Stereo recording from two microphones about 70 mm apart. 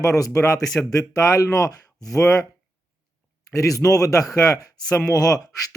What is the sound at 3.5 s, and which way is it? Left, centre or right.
Speech, left.